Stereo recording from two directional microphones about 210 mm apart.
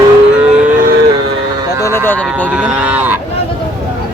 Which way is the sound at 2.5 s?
5° right (ahead or behind).